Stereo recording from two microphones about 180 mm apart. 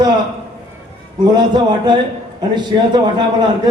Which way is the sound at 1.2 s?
25° right (ahead or behind).